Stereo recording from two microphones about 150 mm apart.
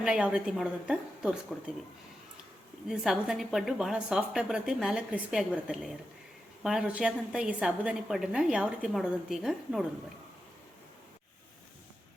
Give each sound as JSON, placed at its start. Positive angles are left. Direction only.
{"t": 0.0, "sound": "a woman's voice", "side_deg": -5}
{"t": 2.9, "sound": "a woman's voice", "side_deg": -5}